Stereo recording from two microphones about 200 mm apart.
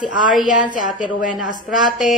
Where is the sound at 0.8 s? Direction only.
40° left (ahead or behind).